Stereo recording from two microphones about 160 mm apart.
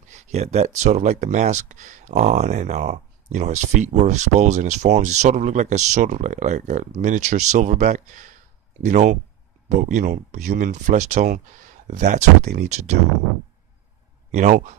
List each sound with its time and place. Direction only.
0.1 s speech: 45° right (ahead or behind)
14.3 s speech: 45° right (ahead or behind)